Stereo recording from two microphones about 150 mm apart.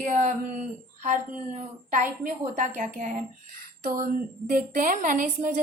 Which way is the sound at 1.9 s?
60° right (ahead or behind).